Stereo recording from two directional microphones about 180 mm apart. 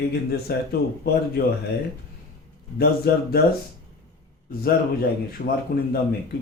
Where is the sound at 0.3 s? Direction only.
60° left (ahead or behind).